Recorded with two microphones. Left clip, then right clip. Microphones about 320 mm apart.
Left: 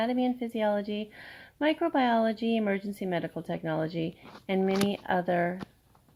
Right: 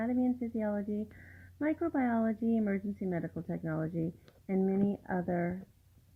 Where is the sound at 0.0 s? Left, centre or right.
Left.